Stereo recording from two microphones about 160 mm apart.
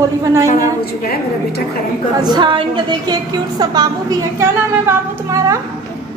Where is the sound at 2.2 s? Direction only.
25° right (ahead or behind).